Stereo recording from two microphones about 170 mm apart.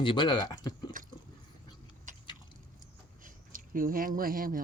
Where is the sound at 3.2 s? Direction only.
55° right (ahead or behind).